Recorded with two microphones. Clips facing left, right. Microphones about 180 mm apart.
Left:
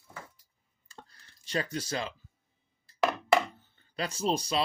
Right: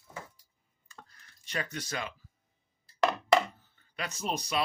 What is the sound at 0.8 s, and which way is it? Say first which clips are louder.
Clicking: left 2 dB; 30° left (ahead or behind).